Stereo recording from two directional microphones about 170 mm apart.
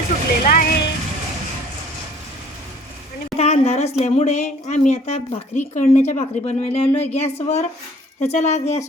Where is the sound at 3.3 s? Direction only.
40° left (ahead or behind).